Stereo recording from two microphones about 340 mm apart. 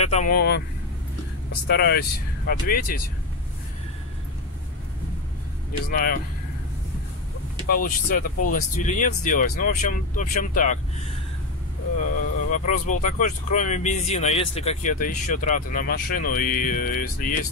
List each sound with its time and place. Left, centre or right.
0.0 s speech: left
1.7 s speech: left
5.9 s speech: left
7.6 s speech: left
12.4 s speech: left